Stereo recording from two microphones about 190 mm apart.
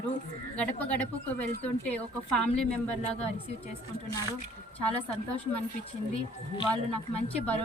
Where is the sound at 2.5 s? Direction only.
35° left (ahead or behind).